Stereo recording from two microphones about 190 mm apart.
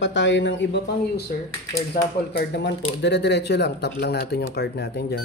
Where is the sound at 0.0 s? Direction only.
75° left (ahead or behind).